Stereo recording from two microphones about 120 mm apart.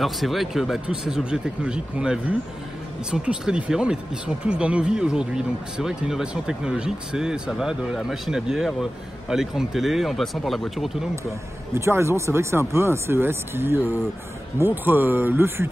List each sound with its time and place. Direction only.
0.0 s speech: centre (ahead or behind)
11.7 s speech: 20° right (ahead or behind)